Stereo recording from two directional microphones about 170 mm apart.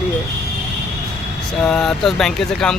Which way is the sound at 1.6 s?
5° left (ahead or behind).